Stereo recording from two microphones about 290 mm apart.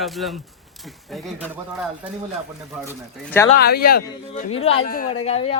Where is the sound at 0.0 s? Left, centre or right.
Centre.